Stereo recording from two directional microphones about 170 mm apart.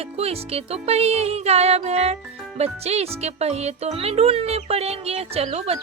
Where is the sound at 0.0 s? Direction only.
35° right (ahead or behind).